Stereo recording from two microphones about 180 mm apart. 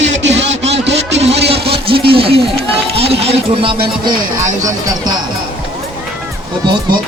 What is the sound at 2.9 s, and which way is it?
Music, 35° right (ahead or behind).